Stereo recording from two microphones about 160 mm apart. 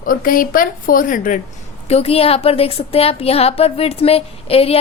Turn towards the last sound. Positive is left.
turn(degrees=40)  # may be behind; listen again after turning